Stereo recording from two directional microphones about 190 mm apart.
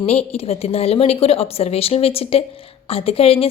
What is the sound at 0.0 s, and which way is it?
A woman's voice, 35° left (ahead or behind).